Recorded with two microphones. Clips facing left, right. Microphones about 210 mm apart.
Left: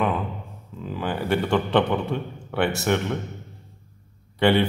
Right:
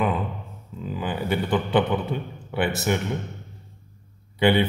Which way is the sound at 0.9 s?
Centre (ahead or behind).